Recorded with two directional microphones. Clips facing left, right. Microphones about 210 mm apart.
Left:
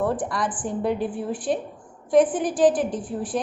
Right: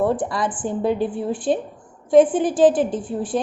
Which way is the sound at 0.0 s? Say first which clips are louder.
Right 4 dB; 25° right (ahead or behind).